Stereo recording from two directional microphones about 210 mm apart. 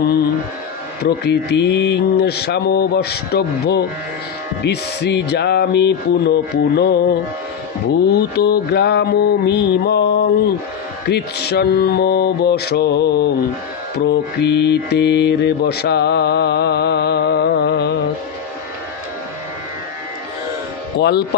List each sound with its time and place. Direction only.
1.0 s mantra: 50° left (ahead or behind)
21.0 s mantra: 50° left (ahead or behind)